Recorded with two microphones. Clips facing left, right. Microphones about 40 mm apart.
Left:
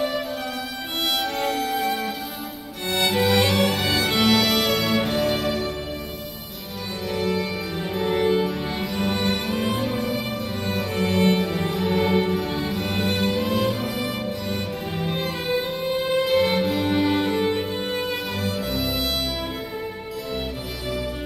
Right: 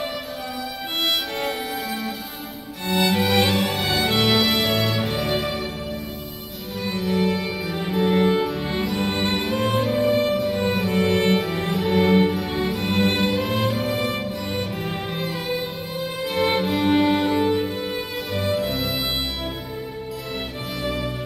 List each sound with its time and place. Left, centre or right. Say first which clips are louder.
1.3 s music: left 2 dB; centre
6.9 s music: right 3 dB; centre
9.1 s music: even; right
9.4 s music: right 2 dB; centre
13.0 s music: right 2 dB; centre
15.0 s music: left 4 dB; centre
16.3 s music: right 3 dB; centre
17.7 s music: left 1 dB; centre
18.4 s music: right 6 dB; centre
20.8 s music: right 2 dB; centre